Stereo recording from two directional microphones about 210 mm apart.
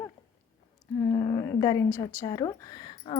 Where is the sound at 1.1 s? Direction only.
15° left (ahead or behind).